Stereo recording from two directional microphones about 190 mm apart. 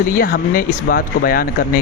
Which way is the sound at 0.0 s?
50° left (ahead or behind).